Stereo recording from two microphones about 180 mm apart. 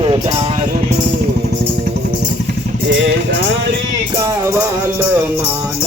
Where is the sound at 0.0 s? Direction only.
30° right (ahead or behind).